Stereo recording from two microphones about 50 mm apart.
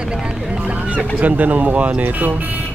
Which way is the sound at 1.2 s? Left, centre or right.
Right.